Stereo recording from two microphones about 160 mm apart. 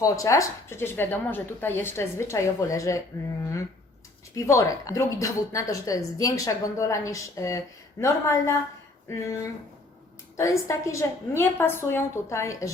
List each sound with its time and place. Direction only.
0.0 s speech: 20° left (ahead or behind)
4.4 s a woman's voice: 20° left (ahead or behind)